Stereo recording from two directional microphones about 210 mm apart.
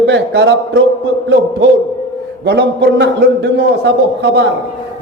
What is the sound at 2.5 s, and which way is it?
A man's voice, 55° right (ahead or behind).